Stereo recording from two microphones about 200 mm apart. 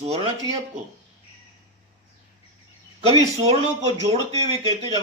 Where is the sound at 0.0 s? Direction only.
30° right (ahead or behind).